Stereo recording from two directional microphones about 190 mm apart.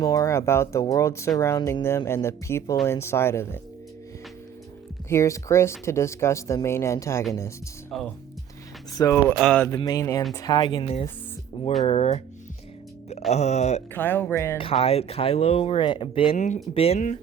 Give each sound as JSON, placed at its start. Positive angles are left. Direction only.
{"t": 0.0, "sound": "speech", "side_deg": 15}
{"t": 5.0, "sound": "speech", "side_deg": 15}
{"t": 8.9, "sound": "speech", "side_deg": 20}
{"t": 9.3, "sound": "speech", "side_deg": 5}
{"t": 9.6, "sound": "speech", "side_deg": 20}
{"t": 13.3, "sound": "speech", "side_deg": 35}
{"t": 13.9, "sound": "speech", "side_deg": 10}
{"t": 14.6, "sound": "speech", "side_deg": 30}
{"t": 16.3, "sound": "speech", "side_deg": 40}